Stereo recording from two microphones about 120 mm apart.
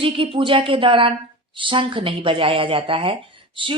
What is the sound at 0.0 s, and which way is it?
Speech, 45° right (ahead or behind).